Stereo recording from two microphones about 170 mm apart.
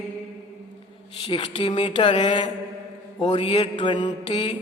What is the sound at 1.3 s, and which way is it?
A man's voice, 30° left (ahead or behind).